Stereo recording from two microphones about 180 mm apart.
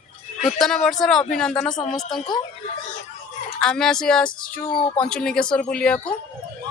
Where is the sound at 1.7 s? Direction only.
25° left (ahead or behind).